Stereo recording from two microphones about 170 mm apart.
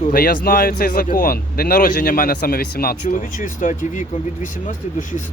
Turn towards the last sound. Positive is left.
turn(degrees=50)  # may be behind; listen again after turning